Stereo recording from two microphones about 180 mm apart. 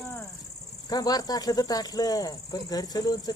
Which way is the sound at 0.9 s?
20° left (ahead or behind).